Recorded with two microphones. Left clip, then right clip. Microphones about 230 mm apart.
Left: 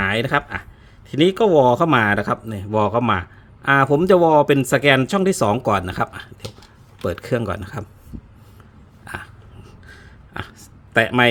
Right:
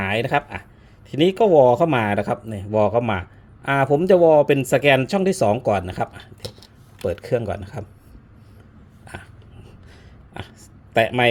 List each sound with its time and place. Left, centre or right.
0.0 s speech: centre
9.9 s a sound: centre
10.9 s speech: centre